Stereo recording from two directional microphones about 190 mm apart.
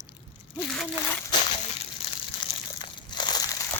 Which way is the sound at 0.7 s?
Centre (ahead or behind).